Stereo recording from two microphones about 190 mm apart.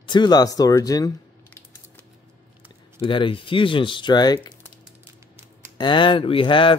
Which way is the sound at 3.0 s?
25° left (ahead or behind).